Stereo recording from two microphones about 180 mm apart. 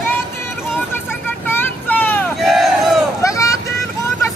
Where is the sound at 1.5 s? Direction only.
10° left (ahead or behind).